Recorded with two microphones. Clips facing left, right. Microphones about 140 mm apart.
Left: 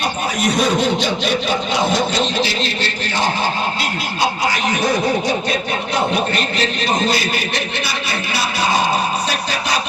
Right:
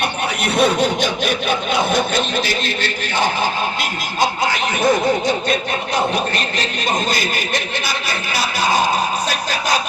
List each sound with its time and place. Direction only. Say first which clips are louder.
0.4 s speech: right 1 dB; 60° right (ahead or behind)